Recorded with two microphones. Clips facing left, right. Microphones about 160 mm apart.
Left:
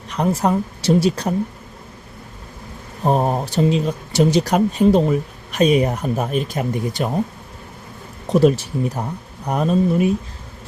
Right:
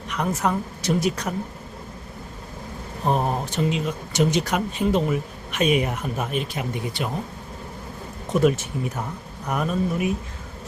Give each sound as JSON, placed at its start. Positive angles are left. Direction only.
{"t": 0.1, "sound": "speech", "side_deg": 35}
{"t": 3.1, "sound": "speech", "side_deg": 35}
{"t": 8.3, "sound": "speech", "side_deg": 35}